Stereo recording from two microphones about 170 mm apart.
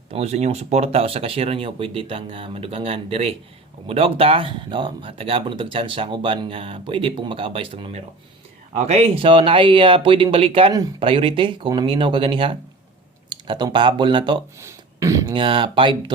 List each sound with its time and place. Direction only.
0.1 s speech: 40° right (ahead or behind)
14.6 s a sound: 15° right (ahead or behind)
15.4 s speech: 30° right (ahead or behind)